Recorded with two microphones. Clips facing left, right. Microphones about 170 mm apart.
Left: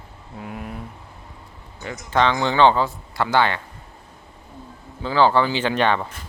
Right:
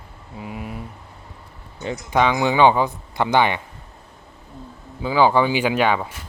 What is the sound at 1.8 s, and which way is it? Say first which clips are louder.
Speech: right 1 dB; 15° right (ahead or behind).